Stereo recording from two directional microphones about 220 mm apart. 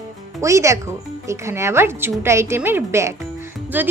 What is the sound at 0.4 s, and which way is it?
Speech, 15° right (ahead or behind).